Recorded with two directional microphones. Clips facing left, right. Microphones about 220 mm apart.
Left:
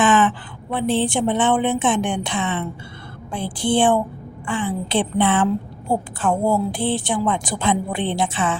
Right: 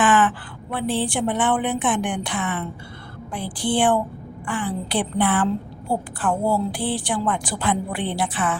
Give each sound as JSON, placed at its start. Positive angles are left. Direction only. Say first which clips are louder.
{"t": 0.0, "sound": "a woman's voice", "louder": "left 2 dB", "side_deg": 20}